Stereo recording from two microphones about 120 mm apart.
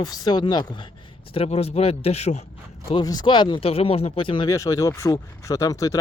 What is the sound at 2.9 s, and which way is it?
Speech, 35° left (ahead or behind).